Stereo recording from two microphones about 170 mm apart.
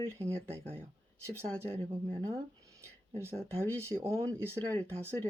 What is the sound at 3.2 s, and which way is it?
Speech, 15° right (ahead or behind).